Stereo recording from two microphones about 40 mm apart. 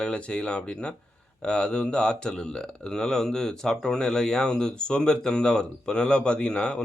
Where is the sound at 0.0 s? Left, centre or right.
Left.